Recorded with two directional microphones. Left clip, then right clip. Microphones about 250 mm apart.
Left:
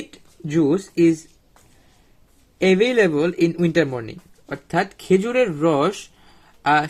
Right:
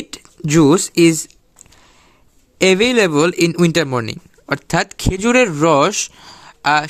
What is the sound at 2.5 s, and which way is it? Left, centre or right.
A man's voice, right.